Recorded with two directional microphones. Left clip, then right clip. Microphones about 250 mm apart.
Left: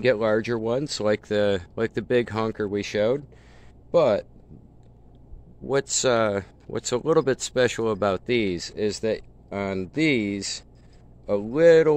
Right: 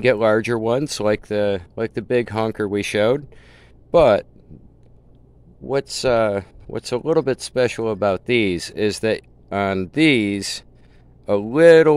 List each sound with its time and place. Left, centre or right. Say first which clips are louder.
0.0 s speech: right 5 dB; right
5.7 s speech: right 3 dB; centre; by 11.9 s right